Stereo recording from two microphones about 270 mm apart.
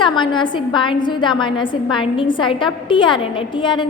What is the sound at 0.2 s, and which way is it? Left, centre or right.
A woman's voice, centre.